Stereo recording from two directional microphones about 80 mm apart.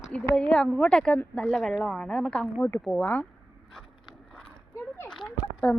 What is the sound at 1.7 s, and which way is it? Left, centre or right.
Speech, centre.